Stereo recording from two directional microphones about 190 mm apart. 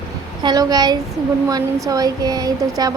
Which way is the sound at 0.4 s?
20° right (ahead or behind).